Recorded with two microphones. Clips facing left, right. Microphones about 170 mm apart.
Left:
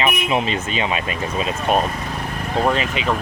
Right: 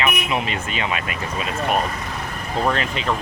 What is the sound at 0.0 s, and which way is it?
Speech, 25° left (ahead or behind).